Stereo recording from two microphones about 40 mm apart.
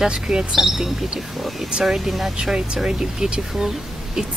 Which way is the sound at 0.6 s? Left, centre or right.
Centre.